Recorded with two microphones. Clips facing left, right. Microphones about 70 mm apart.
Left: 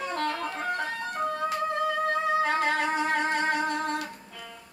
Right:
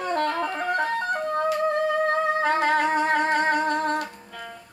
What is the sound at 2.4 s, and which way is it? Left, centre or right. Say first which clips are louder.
Wind instrument: right 5 dB; right.